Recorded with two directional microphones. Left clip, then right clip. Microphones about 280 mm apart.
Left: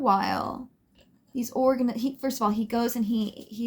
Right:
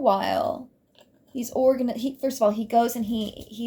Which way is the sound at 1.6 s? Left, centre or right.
Left.